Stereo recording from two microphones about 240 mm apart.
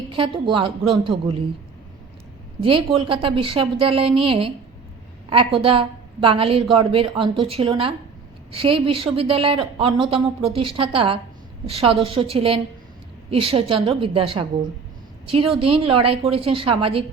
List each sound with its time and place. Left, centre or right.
0.1 s a woman's voice: right
2.6 s a woman's voice: right
5.5 s a woman's voice: right